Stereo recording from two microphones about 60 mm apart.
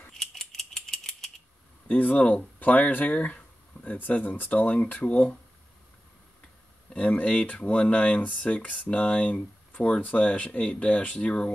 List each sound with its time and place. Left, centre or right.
0.2 s a sound: centre
1.9 s speech: left
6.9 s speech: left